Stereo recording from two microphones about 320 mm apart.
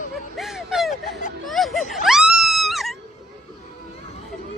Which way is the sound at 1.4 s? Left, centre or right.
Centre.